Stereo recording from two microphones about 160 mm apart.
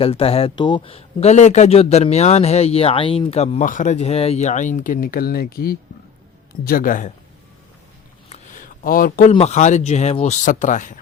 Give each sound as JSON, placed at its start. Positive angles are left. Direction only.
{"t": 0.0, "sound": "speech", "side_deg": 35}
{"t": 3.7, "sound": "speech", "side_deg": 50}
{"t": 6.7, "sound": "speech", "side_deg": 60}
{"t": 8.3, "sound": "a sound", "side_deg": 55}
{"t": 9.3, "sound": "speech", "side_deg": 45}